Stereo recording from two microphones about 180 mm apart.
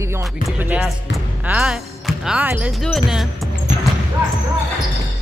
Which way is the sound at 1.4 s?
5° right (ahead or behind).